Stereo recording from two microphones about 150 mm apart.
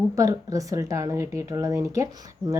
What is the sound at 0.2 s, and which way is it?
Speech, 20° right (ahead or behind).